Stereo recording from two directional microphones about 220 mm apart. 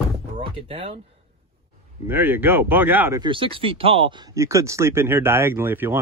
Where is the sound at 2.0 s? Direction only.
10° right (ahead or behind).